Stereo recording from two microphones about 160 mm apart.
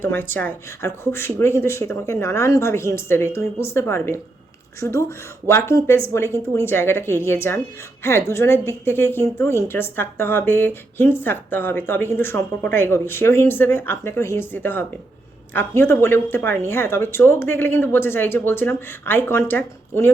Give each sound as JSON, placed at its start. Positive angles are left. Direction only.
{"t": 0.0, "sound": "a woman's voice", "side_deg": 15}